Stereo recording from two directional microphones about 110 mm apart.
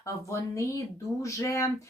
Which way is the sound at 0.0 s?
30° left (ahead or behind).